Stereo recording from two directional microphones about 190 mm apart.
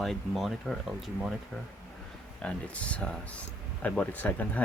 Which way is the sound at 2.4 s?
5° left (ahead or behind).